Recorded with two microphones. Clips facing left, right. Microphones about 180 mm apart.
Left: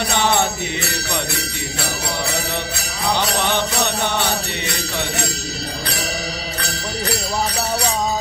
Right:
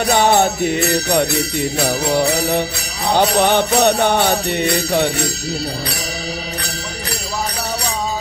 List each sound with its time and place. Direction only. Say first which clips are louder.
0.0 s jingle bell: right 5 dB; 45° right (ahead or behind)
3.2 s jingle bell: right 9 dB; 50° right (ahead or behind)